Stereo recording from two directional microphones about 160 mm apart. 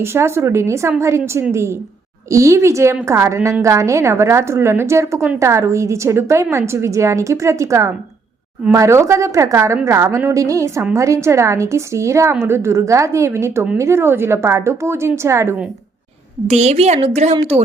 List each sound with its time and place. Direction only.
0.0 s a woman's voice: 15° right (ahead or behind)
16.5 s a woman's voice: 45° right (ahead or behind)